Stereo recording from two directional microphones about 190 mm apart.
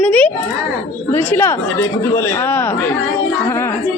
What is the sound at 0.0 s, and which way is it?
A child's voice, 5° left (ahead or behind).